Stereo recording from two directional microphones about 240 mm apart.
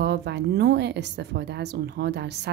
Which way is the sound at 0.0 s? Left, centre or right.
Right.